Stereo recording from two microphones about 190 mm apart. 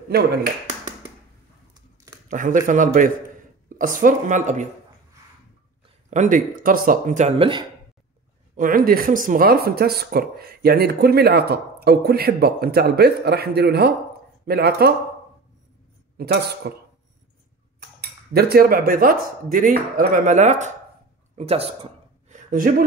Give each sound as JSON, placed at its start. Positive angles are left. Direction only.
{"t": 2.2, "sound": "speech", "side_deg": -45}
{"t": 6.0, "sound": "speech", "side_deg": -40}
{"t": 8.5, "sound": "speech", "side_deg": -45}
{"t": 16.2, "sound": "speech", "side_deg": -55}
{"t": 18.0, "sound": "speech", "side_deg": -55}
{"t": 20.2, "sound": "speech", "side_deg": -40}
{"t": 21.4, "sound": "a sound", "side_deg": -30}
{"t": 22.5, "sound": "speech", "side_deg": -45}